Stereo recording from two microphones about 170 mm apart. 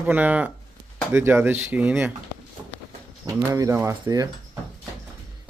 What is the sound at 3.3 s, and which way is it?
Speech, 20° right (ahead or behind).